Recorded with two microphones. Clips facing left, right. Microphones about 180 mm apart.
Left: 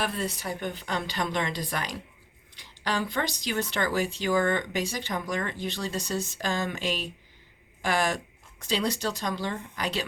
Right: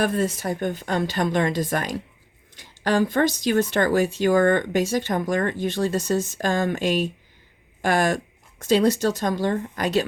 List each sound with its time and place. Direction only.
0.0 s speech: 45° right (ahead or behind)